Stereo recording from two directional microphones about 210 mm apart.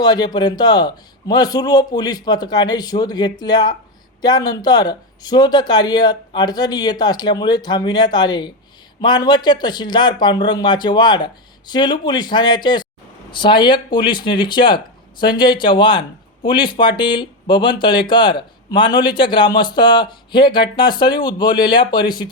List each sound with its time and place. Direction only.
0.0 s speech: 20° left (ahead or behind)